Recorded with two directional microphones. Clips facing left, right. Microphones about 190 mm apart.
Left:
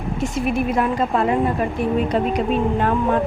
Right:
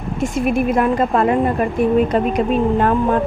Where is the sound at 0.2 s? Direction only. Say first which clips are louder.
Right 4 dB; 50° right (ahead or behind).